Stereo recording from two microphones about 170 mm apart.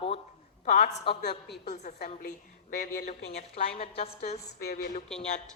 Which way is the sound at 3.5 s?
35° left (ahead or behind).